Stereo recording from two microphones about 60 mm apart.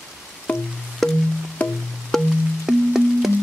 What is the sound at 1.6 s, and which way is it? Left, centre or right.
Music, left.